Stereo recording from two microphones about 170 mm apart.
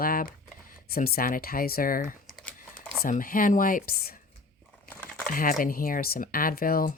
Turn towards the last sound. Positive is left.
turn(degrees=60)  # may be behind; listen again after turning